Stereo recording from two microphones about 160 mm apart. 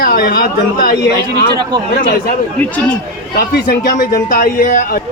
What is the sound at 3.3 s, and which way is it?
Speech, 70° left (ahead or behind).